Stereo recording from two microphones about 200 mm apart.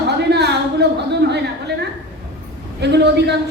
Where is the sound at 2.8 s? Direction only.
60° right (ahead or behind).